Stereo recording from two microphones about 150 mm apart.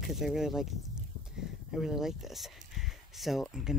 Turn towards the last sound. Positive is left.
turn(degrees=0)  # may be behind; listen again after turning